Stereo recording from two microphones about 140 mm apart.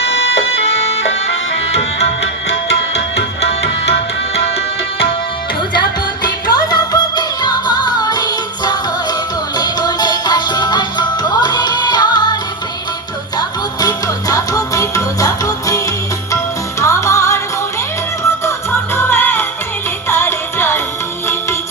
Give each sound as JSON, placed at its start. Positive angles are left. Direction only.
{"t": 6.2, "sound": "music", "side_deg": 30}
{"t": 16.8, "sound": "music", "side_deg": 20}
{"t": 18.9, "sound": "music", "side_deg": 15}